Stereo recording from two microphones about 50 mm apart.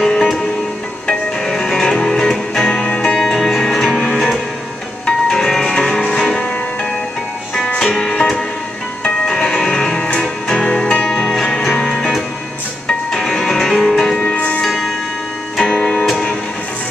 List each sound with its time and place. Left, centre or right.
0.0 s music: centre
13.9 s music: centre
14.6 s music: centre